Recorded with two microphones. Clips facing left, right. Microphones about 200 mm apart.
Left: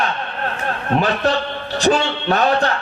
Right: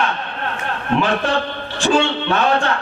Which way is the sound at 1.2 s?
40° left (ahead or behind).